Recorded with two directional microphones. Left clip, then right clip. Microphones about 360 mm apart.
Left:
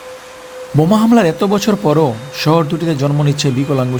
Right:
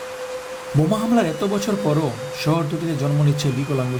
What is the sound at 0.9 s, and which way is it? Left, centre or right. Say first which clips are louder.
Speech: left 8 dB; left.